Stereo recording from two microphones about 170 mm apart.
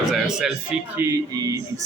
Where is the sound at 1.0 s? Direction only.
20° right (ahead or behind).